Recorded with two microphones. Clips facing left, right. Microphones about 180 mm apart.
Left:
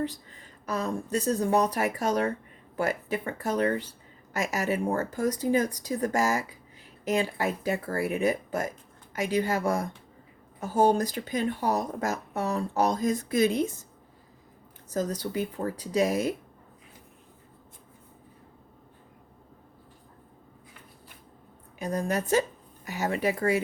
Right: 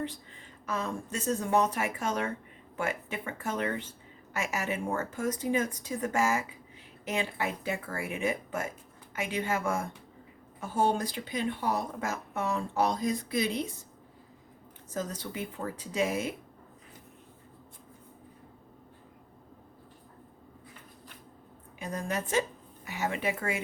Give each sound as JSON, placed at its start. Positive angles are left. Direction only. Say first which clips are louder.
{"t": 0.6, "sound": "speech", "louder": "left 4 dB", "side_deg": 40}
{"t": 14.8, "sound": "speech", "louder": "left 6 dB", "side_deg": 40}
{"t": 21.8, "sound": "speech", "louder": "left 5 dB", "side_deg": 40}